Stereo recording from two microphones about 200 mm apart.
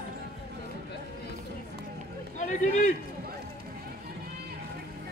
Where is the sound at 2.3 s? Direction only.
40° left (ahead or behind).